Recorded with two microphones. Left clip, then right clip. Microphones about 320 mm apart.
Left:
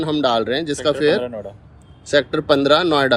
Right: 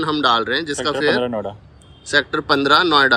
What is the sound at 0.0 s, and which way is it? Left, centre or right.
A man's voice, centre.